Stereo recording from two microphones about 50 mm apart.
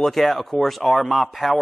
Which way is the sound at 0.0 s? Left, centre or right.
Centre.